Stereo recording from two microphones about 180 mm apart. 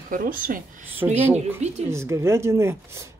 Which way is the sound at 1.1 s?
10° right (ahead or behind).